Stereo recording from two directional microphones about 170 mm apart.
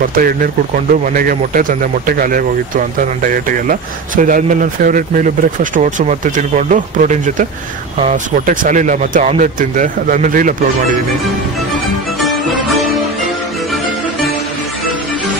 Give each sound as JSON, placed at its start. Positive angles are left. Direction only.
{"t": 0.1, "sound": "speech", "side_deg": -55}